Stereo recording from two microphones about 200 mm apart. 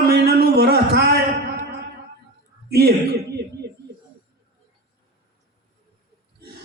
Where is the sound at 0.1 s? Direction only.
55° right (ahead or behind).